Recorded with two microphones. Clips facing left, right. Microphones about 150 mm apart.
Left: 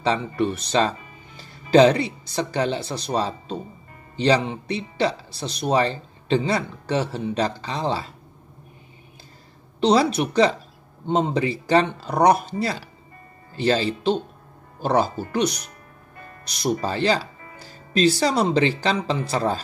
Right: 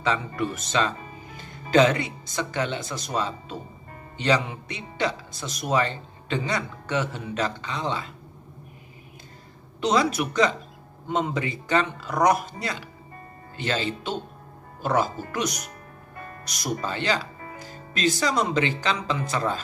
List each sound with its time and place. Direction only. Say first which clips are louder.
0.4 s speech: left 4 dB; 30° left (ahead or behind)
9.8 s speech: left 4 dB; 30° left (ahead or behind)